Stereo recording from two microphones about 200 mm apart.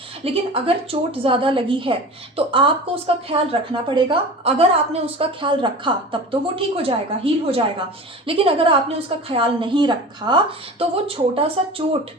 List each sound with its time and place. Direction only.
0.3 s a woman's voice: 30° right (ahead or behind)